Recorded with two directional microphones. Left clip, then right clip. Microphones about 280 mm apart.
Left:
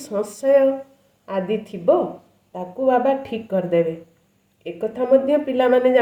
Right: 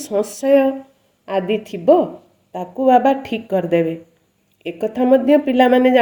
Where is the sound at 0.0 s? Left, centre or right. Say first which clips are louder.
Right 3 dB; right.